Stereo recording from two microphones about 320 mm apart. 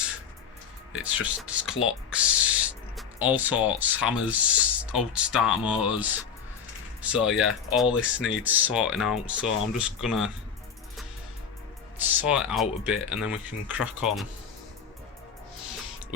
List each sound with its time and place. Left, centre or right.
1.0 s speech: centre
1.7 s speech: left
2.0 s speech: centre
7.9 s speech: left
8.6 s speech: centre
11.9 s speech: centre